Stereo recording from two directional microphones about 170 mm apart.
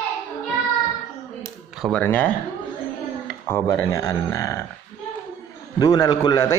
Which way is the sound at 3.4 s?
15° left (ahead or behind).